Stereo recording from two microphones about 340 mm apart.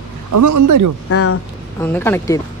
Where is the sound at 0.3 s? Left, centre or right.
Right.